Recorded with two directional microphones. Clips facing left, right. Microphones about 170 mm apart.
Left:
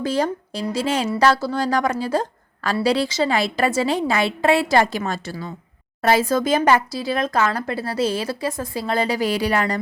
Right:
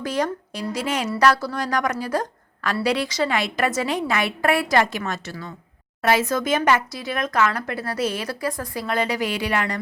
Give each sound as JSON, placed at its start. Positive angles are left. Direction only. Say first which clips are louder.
{"t": 0.0, "sound": "speech", "louder": "left 3 dB", "side_deg": 30}